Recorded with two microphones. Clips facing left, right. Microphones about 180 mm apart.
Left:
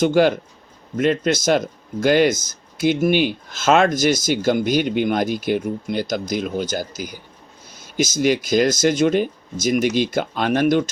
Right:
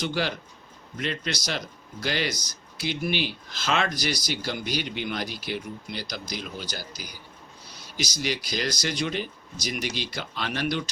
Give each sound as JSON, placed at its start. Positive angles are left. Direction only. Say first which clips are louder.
{"t": 0.0, "sound": "speech", "louder": "left 13 dB", "side_deg": 50}